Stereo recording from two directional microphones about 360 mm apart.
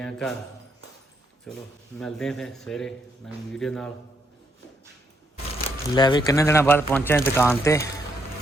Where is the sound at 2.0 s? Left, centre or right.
Centre.